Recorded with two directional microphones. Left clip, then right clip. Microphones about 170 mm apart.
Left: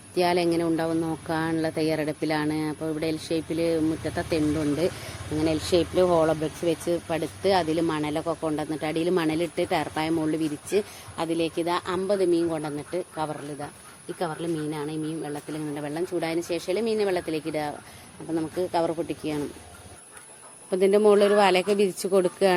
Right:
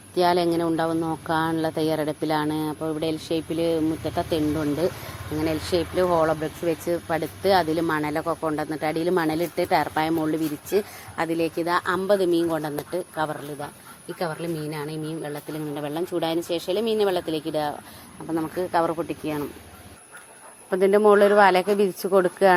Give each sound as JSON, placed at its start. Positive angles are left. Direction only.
{"t": 0.1, "sound": "a woman's voice", "side_deg": 0}
{"t": 5.4, "sound": "speech", "side_deg": 15}
{"t": 6.8, "sound": "a woman's voice", "side_deg": 0}
{"t": 20.7, "sound": "a woman's voice", "side_deg": 0}